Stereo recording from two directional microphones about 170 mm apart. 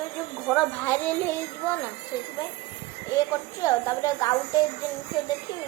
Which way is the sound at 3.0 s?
20° left (ahead or behind).